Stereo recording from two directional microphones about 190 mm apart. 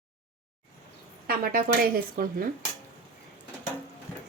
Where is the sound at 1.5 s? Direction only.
50° right (ahead or behind).